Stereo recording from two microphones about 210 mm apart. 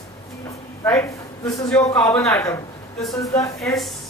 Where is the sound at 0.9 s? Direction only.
15° left (ahead or behind).